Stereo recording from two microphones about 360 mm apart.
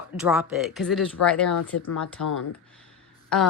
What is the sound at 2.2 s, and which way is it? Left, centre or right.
Speech, left.